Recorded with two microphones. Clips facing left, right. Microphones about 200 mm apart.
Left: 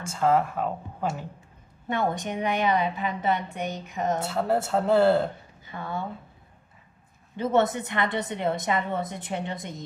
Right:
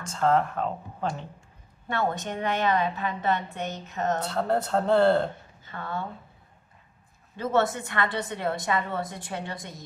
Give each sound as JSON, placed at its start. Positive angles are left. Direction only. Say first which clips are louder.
{"t": 0.0, "sound": "a woman's voice", "louder": "left 1 dB", "side_deg": 10}
{"t": 7.3, "sound": "a woman's voice", "louder": "left 2 dB", "side_deg": 20}